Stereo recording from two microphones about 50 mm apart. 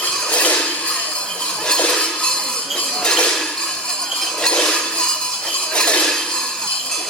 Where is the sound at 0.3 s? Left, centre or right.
Left.